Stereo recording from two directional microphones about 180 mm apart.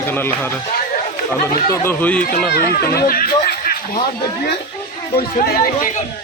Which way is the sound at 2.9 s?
55° left (ahead or behind).